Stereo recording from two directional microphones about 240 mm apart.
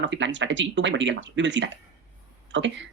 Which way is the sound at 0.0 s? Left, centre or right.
Right.